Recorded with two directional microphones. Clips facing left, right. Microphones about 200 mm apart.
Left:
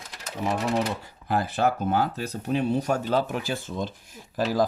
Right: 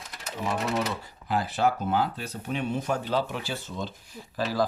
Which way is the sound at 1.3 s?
55° left (ahead or behind).